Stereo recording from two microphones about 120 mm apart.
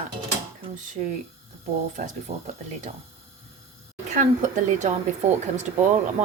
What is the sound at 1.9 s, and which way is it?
Speech, 90° right.